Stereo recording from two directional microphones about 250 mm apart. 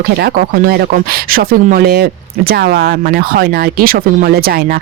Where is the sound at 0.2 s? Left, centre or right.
Right.